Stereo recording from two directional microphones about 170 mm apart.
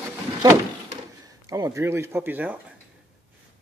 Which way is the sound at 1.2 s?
20° right (ahead or behind).